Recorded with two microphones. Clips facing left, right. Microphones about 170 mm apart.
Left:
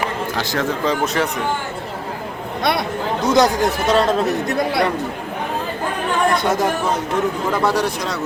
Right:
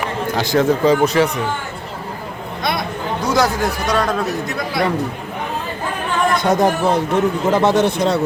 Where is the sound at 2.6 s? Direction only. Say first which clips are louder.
Left 2 dB; 65° left (ahead or behind).